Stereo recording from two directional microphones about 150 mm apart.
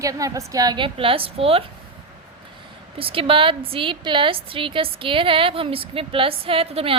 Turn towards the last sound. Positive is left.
turn(degrees=-40)  # may be behind; listen again after turning